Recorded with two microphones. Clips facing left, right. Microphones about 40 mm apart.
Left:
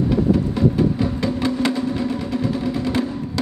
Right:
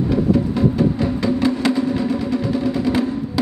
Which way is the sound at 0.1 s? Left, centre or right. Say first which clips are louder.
Right 1 dB; centre.